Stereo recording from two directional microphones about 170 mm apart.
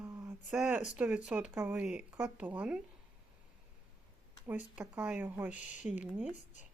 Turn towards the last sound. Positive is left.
turn(degrees=-10)  # may be behind; listen again after turning